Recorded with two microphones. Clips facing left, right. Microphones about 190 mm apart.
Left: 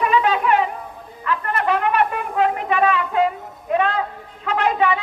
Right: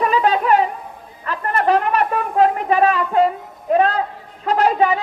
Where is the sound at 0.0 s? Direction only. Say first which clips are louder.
Right 1 dB; 40° right (ahead or behind).